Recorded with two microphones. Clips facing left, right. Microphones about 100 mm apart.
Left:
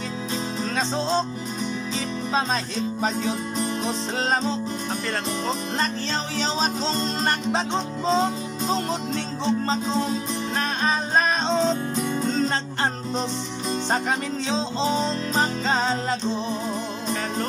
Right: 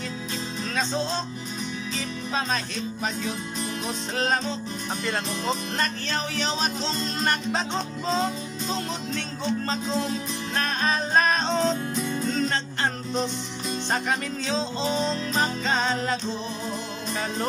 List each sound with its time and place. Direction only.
0.7 s music: 25° left (ahead or behind)
2.3 s music: 25° left (ahead or behind)
6.4 s music: 30° left (ahead or behind)
10.8 s music: 15° left (ahead or behind)
15.6 s music: 30° left (ahead or behind)